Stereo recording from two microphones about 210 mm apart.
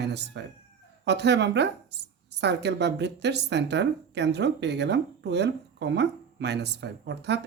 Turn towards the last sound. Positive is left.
turn(degrees=-55)  # may be behind; listen again after turning